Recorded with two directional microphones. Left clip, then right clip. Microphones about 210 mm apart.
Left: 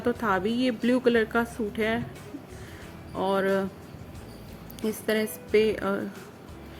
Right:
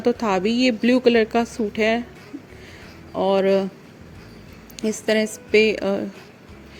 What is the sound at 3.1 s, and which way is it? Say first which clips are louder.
Speech: right 7 dB; 30° right (ahead or behind).